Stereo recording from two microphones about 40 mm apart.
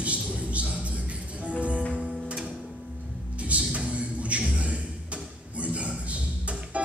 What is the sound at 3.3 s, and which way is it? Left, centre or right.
Music, right.